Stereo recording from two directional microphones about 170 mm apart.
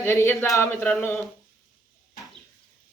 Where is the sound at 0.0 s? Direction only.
20° left (ahead or behind).